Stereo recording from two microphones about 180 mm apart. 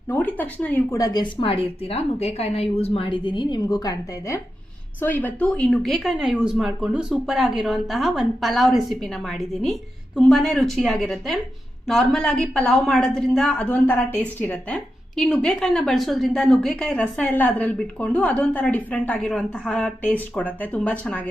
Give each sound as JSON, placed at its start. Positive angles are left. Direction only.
{"t": 0.1, "sound": "a woman's voice", "side_deg": 10}